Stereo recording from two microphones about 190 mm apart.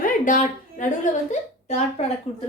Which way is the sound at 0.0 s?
45° left (ahead or behind).